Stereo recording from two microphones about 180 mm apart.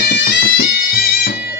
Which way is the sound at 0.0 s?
60° left (ahead or behind).